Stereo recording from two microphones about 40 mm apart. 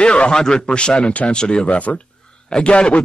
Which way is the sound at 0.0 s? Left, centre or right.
Left.